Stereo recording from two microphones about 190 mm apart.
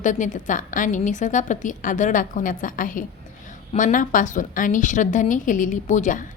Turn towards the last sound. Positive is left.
turn(degrees=40)  # may be behind; listen again after turning